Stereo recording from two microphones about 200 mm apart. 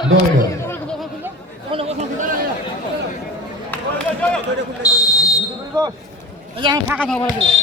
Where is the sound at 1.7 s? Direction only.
25° right (ahead or behind).